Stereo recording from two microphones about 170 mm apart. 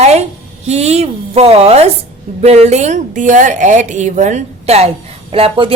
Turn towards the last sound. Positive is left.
turn(degrees=-30)  # may be behind; listen again after turning